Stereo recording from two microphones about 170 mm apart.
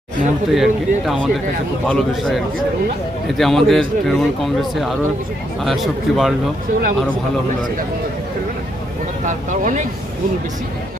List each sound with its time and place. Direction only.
0.5 s speech: centre (ahead or behind)
9.2 s speech: 45° right (ahead or behind)